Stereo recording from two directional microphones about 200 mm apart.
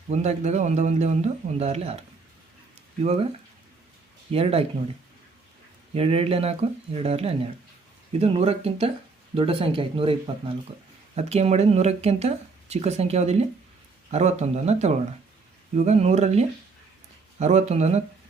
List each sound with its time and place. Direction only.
0.1 s speech: 35° right (ahead or behind)
4.3 s speech: 30° right (ahead or behind)
5.9 s speech: 30° right (ahead or behind)